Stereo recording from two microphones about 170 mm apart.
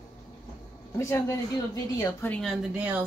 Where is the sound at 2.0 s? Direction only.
20° left (ahead or behind).